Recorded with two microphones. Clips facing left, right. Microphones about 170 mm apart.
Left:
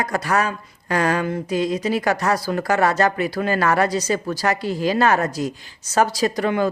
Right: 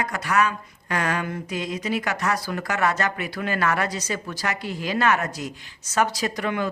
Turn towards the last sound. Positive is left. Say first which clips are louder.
# left 6 dB
turn(degrees=35)  # may be behind; listen again after turning